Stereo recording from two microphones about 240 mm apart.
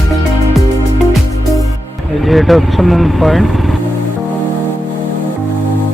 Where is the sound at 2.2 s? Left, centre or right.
Centre.